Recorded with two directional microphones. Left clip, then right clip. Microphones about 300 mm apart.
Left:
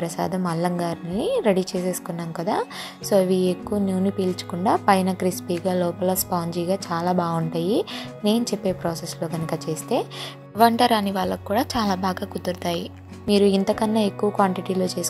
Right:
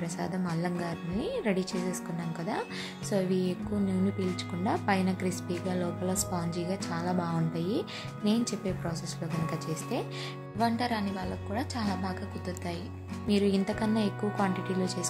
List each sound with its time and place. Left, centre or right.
0.0 s a woman's voice: centre